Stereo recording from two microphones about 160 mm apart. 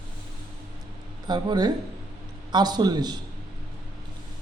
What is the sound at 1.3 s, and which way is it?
A man's voice, 25° right (ahead or behind).